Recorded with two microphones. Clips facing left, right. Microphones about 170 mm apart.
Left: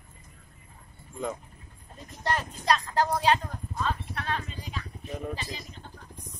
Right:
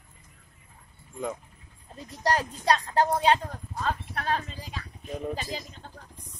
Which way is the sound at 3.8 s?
45° right (ahead or behind).